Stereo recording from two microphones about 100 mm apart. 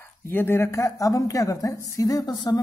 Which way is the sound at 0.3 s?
20° left (ahead or behind).